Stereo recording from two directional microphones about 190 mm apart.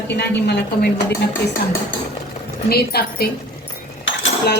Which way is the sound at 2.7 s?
55° left (ahead or behind).